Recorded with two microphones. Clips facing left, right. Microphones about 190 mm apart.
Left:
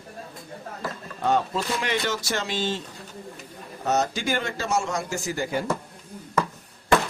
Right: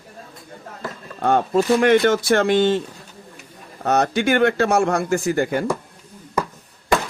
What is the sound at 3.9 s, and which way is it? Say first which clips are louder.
Speech: right 6 dB; 60° right (ahead or behind).